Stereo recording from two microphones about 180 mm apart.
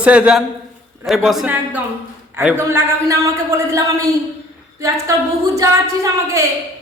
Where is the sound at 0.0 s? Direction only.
5° right (ahead or behind).